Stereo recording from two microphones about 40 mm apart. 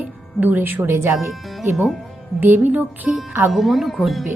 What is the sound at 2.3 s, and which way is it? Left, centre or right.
Speech, right.